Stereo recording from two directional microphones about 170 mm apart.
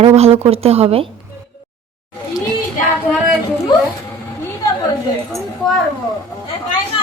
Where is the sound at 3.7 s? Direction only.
25° left (ahead or behind).